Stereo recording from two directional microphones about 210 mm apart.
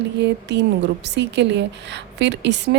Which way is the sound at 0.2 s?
55° right (ahead or behind).